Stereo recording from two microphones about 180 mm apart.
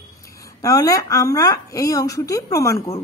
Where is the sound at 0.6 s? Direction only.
20° left (ahead or behind).